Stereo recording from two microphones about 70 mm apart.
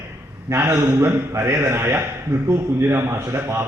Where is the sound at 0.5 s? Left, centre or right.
Right.